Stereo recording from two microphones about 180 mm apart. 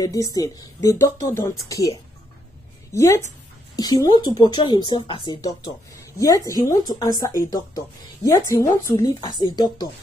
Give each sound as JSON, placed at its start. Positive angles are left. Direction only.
{"t": 0.0, "sound": "a woman's voice", "side_deg": 20}